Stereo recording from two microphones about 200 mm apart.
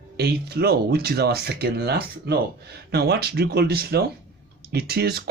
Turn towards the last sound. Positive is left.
turn(degrees=-50)  # may be behind; listen again after turning